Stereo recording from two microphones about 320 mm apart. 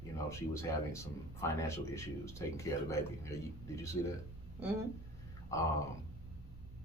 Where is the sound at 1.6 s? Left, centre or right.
Centre.